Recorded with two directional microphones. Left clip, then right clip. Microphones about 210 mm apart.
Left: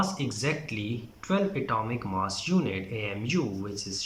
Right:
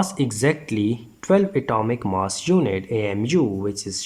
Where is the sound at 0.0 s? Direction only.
50° right (ahead or behind).